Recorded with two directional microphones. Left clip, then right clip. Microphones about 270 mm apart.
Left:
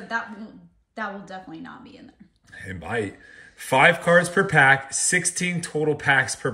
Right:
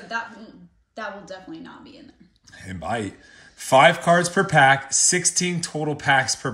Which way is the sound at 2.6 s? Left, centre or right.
Centre.